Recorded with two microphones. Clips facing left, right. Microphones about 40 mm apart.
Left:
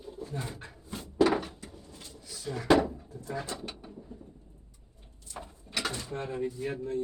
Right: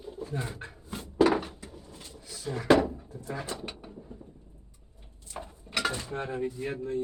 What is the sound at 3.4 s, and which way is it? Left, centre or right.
Speech, right.